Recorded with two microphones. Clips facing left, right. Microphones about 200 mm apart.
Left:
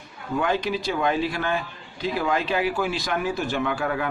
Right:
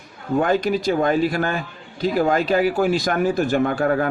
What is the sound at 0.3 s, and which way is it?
A man's voice, 45° right (ahead or behind).